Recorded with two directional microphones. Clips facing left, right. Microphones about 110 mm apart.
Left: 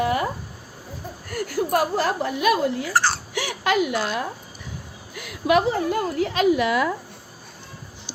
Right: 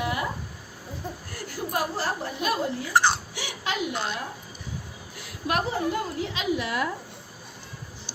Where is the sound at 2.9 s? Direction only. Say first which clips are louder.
Right 3 dB; 20° right (ahead or behind).